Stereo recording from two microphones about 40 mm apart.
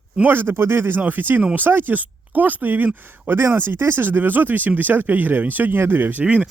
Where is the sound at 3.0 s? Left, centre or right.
Right.